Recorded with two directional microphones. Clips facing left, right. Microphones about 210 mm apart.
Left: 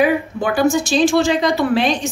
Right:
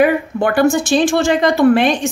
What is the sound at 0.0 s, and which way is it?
A woman's voice, 60° right (ahead or behind).